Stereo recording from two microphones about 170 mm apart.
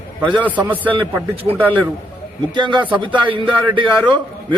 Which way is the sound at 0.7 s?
10° left (ahead or behind).